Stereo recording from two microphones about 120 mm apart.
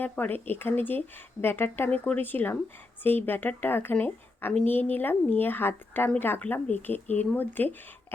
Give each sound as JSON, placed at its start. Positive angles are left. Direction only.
{"t": 0.0, "sound": "a woman's voice", "side_deg": 15}